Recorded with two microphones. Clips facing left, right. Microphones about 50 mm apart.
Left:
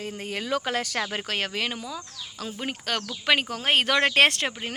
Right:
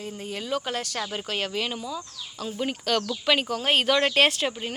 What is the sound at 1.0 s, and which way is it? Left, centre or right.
Speech, left.